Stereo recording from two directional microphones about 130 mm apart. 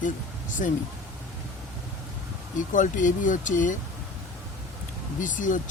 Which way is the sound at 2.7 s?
80° left.